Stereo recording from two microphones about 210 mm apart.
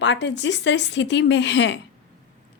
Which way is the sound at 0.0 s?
60° left (ahead or behind).